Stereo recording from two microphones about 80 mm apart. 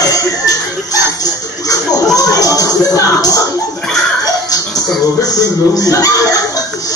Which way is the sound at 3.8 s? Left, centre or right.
Centre.